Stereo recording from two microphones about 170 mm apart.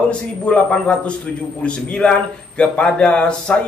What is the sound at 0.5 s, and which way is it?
A man's voice, 5° left (ahead or behind).